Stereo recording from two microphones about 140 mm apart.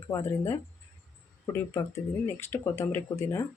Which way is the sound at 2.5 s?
15° left (ahead or behind).